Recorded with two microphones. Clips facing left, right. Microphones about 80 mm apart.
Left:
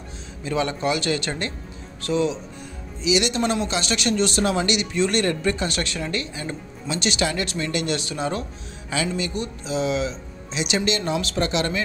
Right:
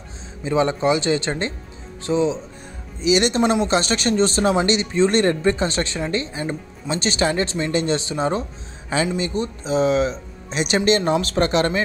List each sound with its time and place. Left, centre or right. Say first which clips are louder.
0.4 s speech: right 5 dB; right
3.0 s speech: right 4 dB; right